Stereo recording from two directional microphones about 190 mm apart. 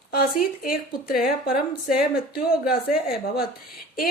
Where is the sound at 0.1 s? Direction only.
50° left (ahead or behind).